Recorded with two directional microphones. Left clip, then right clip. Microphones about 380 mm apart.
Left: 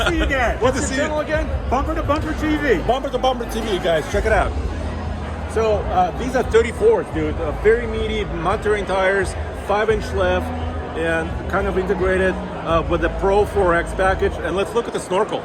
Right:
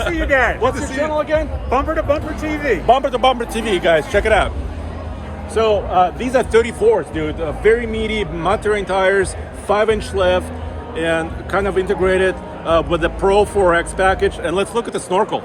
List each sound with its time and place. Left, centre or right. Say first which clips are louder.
0.0 s speech: right 3 dB; centre
1.3 s speech: right 4 dB; right
2.0 s speech: right 3 dB; centre
4.2 s speech: right 3 dB; right
5.5 s speech: right 4 dB; right